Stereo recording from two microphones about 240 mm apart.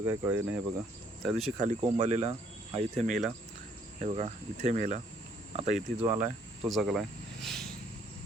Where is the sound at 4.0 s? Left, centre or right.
Right.